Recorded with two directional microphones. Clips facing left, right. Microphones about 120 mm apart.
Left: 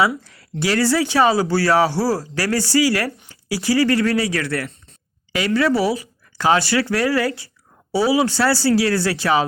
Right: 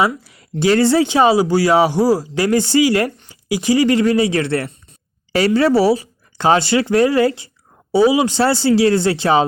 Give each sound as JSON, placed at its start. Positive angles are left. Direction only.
{"t": 0.3, "sound": "a man's voice", "side_deg": -20}